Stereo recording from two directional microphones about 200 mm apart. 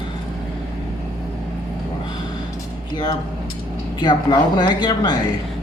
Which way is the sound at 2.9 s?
20° left (ahead or behind).